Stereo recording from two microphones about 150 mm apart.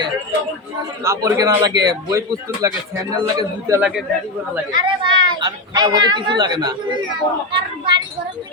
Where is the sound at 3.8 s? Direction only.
5° right (ahead or behind).